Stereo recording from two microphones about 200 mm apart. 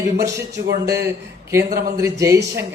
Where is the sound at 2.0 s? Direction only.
15° right (ahead or behind).